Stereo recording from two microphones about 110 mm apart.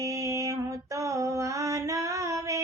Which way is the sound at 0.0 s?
30° right (ahead or behind).